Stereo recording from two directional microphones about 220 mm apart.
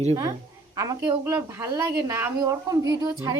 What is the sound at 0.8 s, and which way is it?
A woman's voice, 15° right (ahead or behind).